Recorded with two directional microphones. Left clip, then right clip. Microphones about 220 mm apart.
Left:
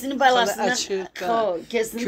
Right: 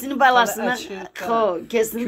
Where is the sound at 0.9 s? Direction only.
40° right (ahead or behind).